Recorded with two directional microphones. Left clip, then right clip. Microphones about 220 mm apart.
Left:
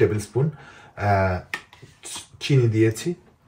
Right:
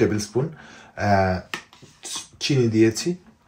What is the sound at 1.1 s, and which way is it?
Finger snapping, 20° right (ahead or behind).